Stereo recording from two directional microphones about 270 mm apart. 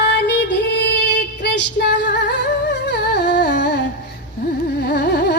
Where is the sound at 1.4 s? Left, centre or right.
Left.